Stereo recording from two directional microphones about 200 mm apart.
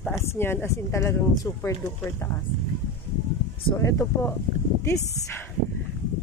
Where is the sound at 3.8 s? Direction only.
15° left (ahead or behind).